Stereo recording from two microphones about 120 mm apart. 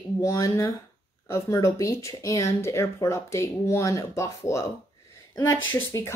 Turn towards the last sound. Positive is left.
turn(degrees=25)  # may be behind; listen again after turning